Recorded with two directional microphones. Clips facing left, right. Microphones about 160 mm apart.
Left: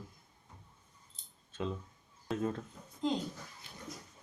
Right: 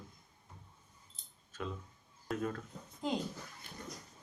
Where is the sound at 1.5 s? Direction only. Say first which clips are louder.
Left 4 dB; 25° left (ahead or behind).